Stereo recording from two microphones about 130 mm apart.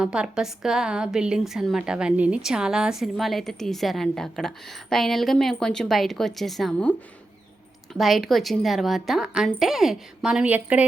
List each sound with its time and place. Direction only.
0.0 s a woman's voice: 5° right (ahead or behind)
7.9 s a woman's voice: centre (ahead or behind)